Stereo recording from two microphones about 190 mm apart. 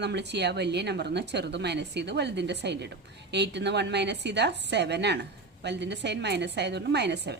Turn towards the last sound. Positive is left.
turn(degrees=-60)  # may be behind; listen again after turning